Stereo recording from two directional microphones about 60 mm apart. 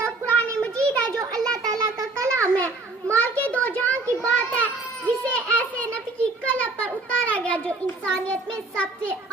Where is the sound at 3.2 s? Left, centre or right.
Left.